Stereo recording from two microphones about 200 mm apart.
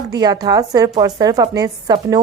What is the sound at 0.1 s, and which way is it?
A woman's voice, 20° right (ahead or behind).